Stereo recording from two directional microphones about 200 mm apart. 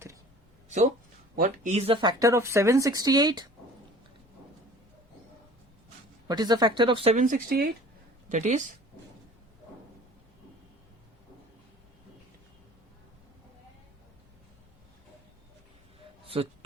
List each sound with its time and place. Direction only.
1.4 s speech: 40° right (ahead or behind); by 3.4 s 20° right (ahead or behind)
6.2 s speech: 20° right (ahead or behind); by 8.7 s 35° right (ahead or behind)
16.2 s a sound: 30° right (ahead or behind)